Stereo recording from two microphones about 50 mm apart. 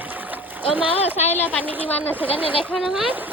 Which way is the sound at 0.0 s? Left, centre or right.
Right.